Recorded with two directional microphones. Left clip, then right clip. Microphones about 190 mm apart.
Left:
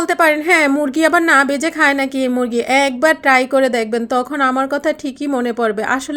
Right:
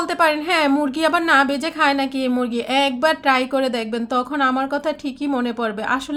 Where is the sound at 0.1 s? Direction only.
20° left (ahead or behind).